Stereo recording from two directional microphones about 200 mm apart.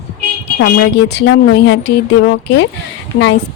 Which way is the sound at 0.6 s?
55° left (ahead or behind).